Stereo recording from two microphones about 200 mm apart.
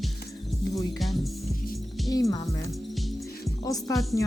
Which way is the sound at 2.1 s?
20° left (ahead or behind).